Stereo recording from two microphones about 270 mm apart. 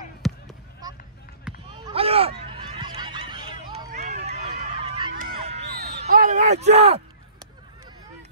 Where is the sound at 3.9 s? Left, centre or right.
Right.